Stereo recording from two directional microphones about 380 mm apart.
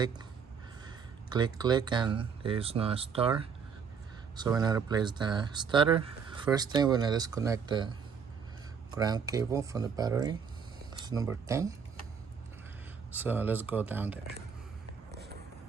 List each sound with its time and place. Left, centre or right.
1.3 s speech: centre
9.0 s speech: centre
13.1 s speech: centre
15.1 s run: right